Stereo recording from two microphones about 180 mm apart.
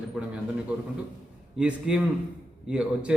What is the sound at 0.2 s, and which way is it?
Speech, 5° right (ahead or behind).